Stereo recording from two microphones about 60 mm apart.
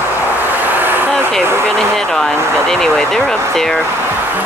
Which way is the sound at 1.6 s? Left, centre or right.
Centre.